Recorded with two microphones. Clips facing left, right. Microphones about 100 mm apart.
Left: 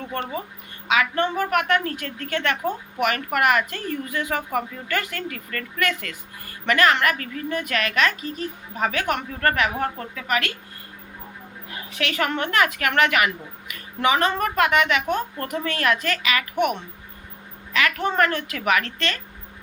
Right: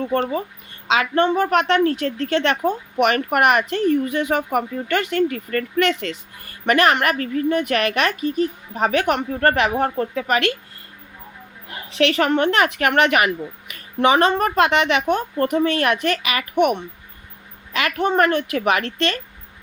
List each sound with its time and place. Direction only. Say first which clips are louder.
0.0 s a woman's voice: right 8 dB; 35° right (ahead or behind)
11.7 s a woman's voice: right 9 dB; 30° right (ahead or behind)